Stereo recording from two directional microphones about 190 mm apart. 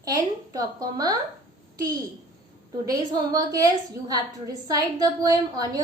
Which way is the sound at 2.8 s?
20° right (ahead or behind).